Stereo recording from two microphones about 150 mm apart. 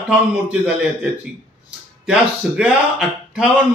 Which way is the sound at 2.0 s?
5° right (ahead or behind).